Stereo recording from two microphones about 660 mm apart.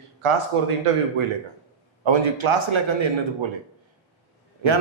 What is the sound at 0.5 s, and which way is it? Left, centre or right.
Speech, right.